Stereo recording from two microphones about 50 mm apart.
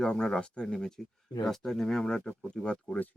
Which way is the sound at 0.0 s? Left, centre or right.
Centre.